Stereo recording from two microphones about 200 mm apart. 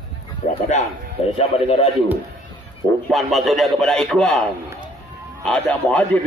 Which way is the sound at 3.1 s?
Centre (ahead or behind).